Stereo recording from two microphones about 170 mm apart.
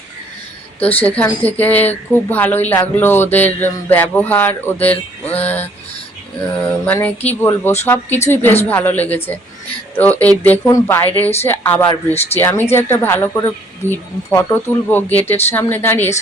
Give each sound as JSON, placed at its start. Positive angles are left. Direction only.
{"t": 0.9, "sound": "speech", "side_deg": 10}
{"t": 6.8, "sound": "speech", "side_deg": 10}